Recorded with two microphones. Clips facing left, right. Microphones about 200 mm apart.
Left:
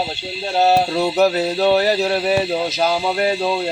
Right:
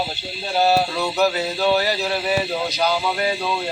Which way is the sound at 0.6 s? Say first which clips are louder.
Left 3 dB; 30° left (ahead or behind).